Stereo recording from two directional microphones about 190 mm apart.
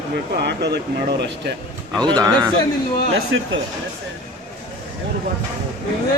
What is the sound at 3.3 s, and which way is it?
Speech, 80° right.